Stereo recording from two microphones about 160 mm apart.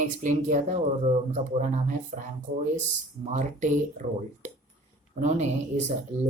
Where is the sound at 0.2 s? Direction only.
50° right (ahead or behind).